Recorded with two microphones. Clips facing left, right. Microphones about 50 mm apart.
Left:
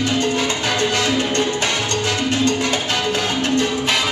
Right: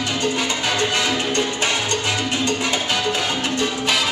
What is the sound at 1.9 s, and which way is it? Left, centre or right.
Music, right.